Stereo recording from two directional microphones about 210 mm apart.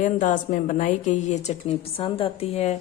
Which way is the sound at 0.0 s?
35° left (ahead or behind).